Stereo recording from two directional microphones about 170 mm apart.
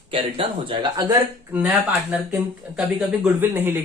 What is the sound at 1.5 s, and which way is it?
Speech, 10° right (ahead or behind).